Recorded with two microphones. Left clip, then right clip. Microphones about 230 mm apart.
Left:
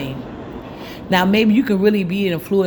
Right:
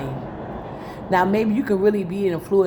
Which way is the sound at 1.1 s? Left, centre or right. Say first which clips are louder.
Left 3 dB; left.